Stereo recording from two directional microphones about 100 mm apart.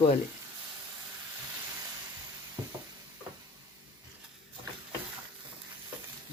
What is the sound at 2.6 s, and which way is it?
Stir, 50° right (ahead or behind).